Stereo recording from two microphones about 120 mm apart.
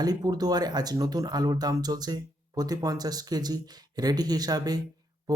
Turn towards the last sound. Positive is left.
turn(degrees=-35)  # may be behind; listen again after turning